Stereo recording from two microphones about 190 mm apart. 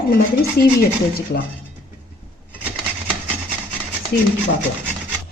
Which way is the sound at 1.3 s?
60° left (ahead or behind).